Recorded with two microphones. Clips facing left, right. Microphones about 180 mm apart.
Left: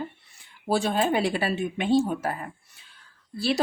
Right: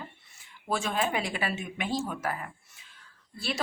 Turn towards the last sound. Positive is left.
turn(degrees=35)  # may be behind; listen again after turning